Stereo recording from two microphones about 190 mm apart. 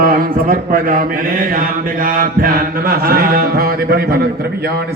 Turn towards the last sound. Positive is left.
turn(degrees=-55)  # may be behind; listen again after turning